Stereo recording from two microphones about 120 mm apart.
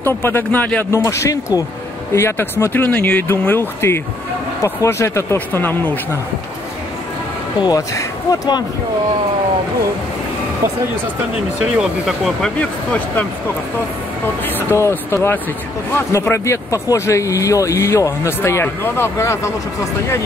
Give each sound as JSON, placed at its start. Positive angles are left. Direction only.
{"t": 0.0, "sound": "speech", "side_deg": 15}
{"t": 0.9, "sound": "speech", "side_deg": 25}
{"t": 7.6, "sound": "speech", "side_deg": 25}
{"t": 11.6, "sound": "speech", "side_deg": -5}
{"t": 14.4, "sound": "speech", "side_deg": 20}